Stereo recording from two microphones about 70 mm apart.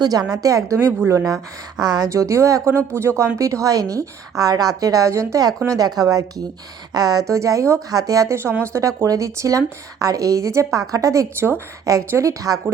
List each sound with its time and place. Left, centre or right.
0.0 s a woman's voice: right
0.9 s speech: right
1.8 s speech: right
3.3 s a woman's voice: right
7.3 s a woman's voice: right
8.4 s speech: right
11.3 s speech: right
11.9 s speech: right